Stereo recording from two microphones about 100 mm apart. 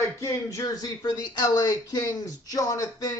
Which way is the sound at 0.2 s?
30° left (ahead or behind).